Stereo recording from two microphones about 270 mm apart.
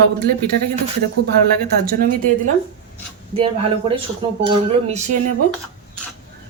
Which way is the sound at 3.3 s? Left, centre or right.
Right.